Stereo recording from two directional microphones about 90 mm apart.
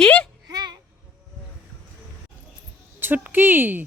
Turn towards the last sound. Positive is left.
turn(degrees=-25)  # may be behind; listen again after turning